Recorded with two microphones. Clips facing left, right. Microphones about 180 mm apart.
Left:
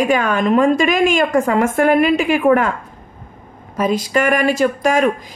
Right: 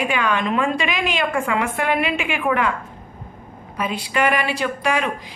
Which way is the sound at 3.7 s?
40° left (ahead or behind).